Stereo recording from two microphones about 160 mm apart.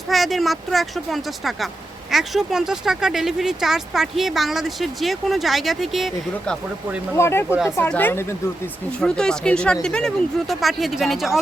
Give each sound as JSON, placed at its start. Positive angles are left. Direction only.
{"t": 0.1, "sound": "speech", "side_deg": 0}
{"t": 7.2, "sound": "speech", "side_deg": 15}